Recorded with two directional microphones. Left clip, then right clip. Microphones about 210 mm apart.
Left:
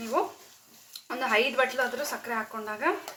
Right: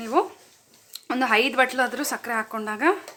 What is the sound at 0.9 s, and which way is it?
Speech, 60° right (ahead or behind).